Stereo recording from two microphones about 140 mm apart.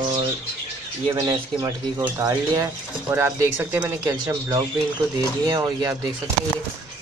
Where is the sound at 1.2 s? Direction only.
30° right (ahead or behind).